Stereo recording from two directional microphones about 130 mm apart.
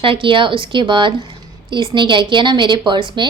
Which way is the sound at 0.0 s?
40° right (ahead or behind).